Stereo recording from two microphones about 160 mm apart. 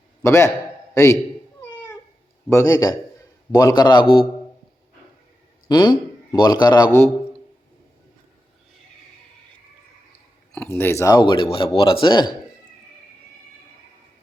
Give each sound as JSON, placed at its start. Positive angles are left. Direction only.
{"t": 0.2, "sound": "speech", "side_deg": 20}
{"t": 2.5, "sound": "speech", "side_deg": 20}
{"t": 5.6, "sound": "speech", "side_deg": 25}
{"t": 10.5, "sound": "speech", "side_deg": 10}